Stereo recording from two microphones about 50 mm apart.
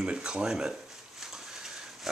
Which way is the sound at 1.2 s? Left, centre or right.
Centre.